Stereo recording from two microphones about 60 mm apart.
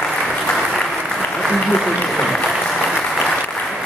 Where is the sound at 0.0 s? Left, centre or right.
Centre.